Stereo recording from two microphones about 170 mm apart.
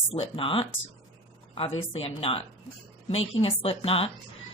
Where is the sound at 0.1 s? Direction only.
30° left (ahead or behind).